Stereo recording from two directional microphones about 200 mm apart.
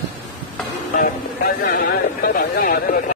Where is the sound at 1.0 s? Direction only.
45° left (ahead or behind).